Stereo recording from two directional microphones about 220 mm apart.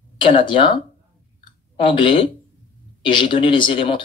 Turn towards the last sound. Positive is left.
turn(degrees=25)  # may be behind; listen again after turning